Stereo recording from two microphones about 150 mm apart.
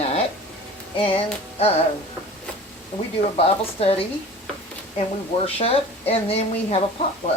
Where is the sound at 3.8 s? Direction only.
40° left (ahead or behind).